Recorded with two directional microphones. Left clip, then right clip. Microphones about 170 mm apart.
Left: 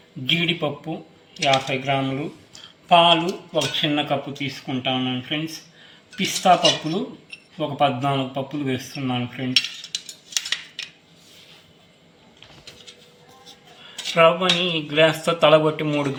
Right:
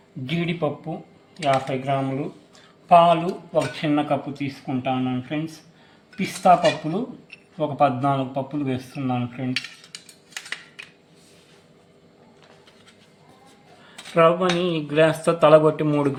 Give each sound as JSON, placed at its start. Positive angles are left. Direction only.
{"t": 0.3, "sound": "speech", "side_deg": -25}
{"t": 1.4, "sound": "speech", "side_deg": -5}
{"t": 1.7, "sound": "speech", "side_deg": -20}
{"t": 14.2, "sound": "speech", "side_deg": -45}